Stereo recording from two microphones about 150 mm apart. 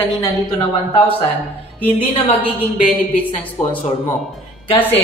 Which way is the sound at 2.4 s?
10° left (ahead or behind).